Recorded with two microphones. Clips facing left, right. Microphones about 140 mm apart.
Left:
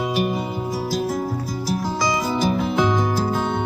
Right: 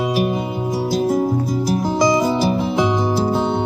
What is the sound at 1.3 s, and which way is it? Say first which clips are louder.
Music: right 7 dB; 20° right (ahead or behind).